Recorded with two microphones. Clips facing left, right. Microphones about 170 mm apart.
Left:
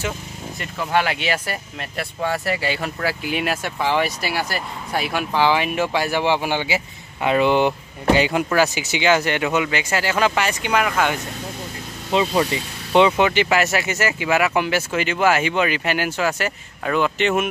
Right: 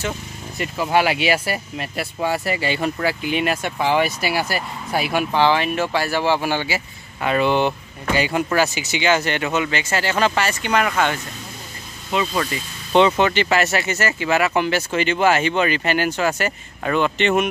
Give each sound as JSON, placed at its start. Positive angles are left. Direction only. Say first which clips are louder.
{"t": 0.6, "sound": "speech", "louder": "right 3 dB", "side_deg": -10}
{"t": 12.1, "sound": "speech", "louder": "left 3 dB", "side_deg": 30}
{"t": 12.9, "sound": "speech", "louder": "even", "side_deg": 10}